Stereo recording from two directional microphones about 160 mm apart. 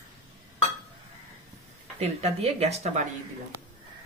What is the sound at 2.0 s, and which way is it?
A woman's voice, 40° right (ahead or behind).